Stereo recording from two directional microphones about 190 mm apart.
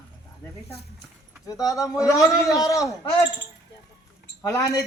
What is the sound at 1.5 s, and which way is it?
A man's voice, 15° left (ahead or behind).